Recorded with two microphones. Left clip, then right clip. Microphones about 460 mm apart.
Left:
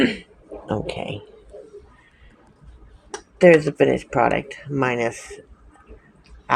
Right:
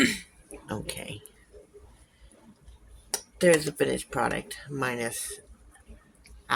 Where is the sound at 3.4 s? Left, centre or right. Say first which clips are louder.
Left 9 dB; right.